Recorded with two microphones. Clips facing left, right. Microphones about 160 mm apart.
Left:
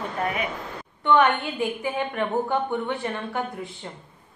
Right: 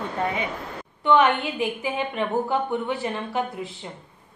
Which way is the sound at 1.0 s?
15° right (ahead or behind).